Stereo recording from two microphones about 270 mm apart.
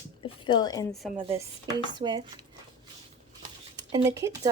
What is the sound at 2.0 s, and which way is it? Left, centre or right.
Speech, centre.